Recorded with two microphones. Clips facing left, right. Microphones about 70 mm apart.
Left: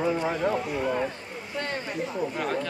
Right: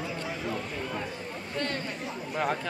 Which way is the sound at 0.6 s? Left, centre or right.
Centre.